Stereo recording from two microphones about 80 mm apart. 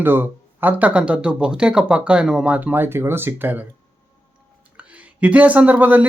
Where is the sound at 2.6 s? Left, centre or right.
Right.